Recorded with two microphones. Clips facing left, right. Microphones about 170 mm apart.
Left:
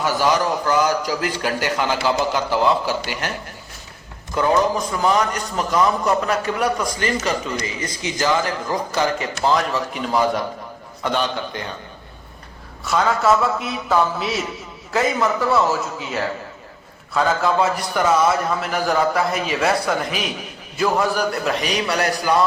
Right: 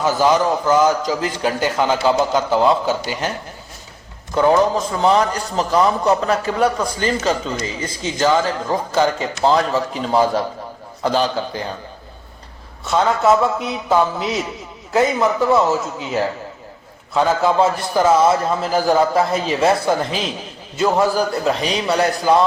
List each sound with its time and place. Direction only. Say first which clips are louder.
0.2 s a man's voice: right 4 dB; 20° right (ahead or behind)
4.4 s a man's voice: right 3 dB; 25° right (ahead or behind)
12.8 s a man's voice: right 2 dB; 20° right (ahead or behind)